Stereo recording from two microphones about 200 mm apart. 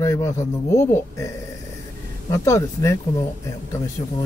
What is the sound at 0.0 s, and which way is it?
Speech, 15° left (ahead or behind).